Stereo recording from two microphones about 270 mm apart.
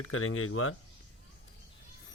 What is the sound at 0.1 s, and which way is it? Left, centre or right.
Speech, left.